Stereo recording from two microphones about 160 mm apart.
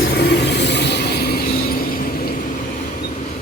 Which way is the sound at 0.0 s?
85° left.